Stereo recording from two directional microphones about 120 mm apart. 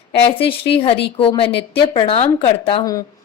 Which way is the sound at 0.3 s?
50° left (ahead or behind).